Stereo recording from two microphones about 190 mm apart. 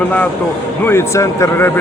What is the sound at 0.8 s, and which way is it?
Speech, 15° left (ahead or behind).